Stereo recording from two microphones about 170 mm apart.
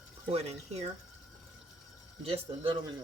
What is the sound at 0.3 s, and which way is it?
Speech, 40° right (ahead or behind).